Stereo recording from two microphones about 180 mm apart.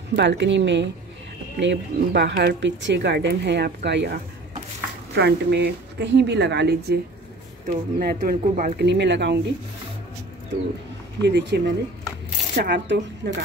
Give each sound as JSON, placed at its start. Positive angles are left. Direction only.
{"t": 0.1, "sound": "speech", "side_deg": -70}
{"t": 7.6, "sound": "speech", "side_deg": -55}
{"t": 8.8, "sound": "speech", "side_deg": -75}
{"t": 11.2, "sound": "speech", "side_deg": -70}